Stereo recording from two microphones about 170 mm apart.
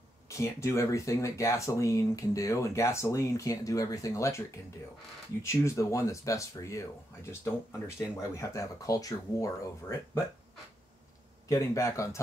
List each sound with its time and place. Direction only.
0.3 s speech: 15° left (ahead or behind)
5.4 s speech: 15° left (ahead or behind)
11.4 s speech: 20° left (ahead or behind)